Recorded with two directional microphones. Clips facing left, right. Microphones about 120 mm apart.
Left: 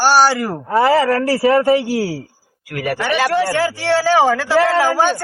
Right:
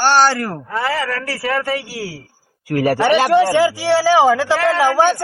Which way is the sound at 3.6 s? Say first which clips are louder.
Right 2 dB; 10° right (ahead or behind).